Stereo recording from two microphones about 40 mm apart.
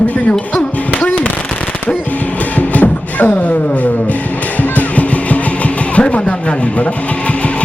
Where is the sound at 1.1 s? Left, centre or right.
Left.